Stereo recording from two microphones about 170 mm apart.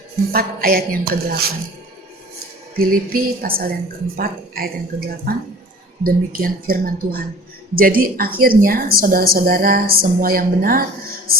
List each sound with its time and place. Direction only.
0.3 s speech: 60° right (ahead or behind)
2.7 s speech: 60° right (ahead or behind)